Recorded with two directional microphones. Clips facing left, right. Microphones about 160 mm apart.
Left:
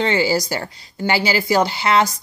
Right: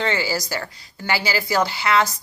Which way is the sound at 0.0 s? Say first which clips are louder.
Left 5 dB; 25° left (ahead or behind).